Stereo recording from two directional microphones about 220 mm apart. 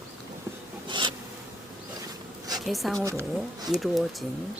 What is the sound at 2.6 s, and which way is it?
Speech, centre (ahead or behind).